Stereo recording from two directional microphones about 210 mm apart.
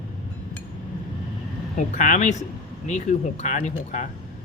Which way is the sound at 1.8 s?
35° left (ahead or behind).